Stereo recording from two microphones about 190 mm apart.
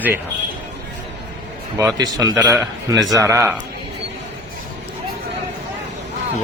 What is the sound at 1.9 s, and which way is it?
A man's voice, 20° right (ahead or behind).